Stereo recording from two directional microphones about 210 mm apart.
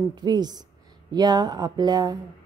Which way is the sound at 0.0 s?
20° right (ahead or behind).